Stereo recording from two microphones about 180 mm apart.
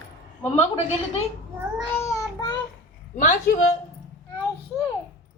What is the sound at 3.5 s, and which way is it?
Speech, 65° left (ahead or behind).